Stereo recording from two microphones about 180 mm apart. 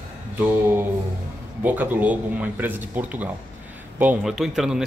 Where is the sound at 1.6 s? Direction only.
10° right (ahead or behind).